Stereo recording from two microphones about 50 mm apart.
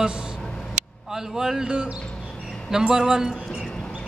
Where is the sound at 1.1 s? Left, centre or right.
Centre.